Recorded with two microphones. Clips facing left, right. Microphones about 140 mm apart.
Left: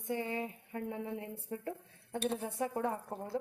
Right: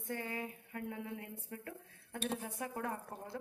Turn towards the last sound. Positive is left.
turn(degrees=25)  # may be behind; listen again after turning